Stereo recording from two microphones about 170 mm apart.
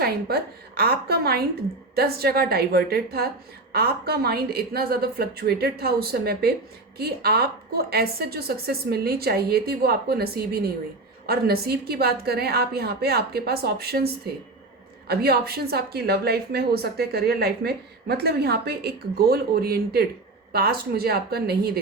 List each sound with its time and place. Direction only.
0.0 s a woman's voice: 70° right (ahead or behind)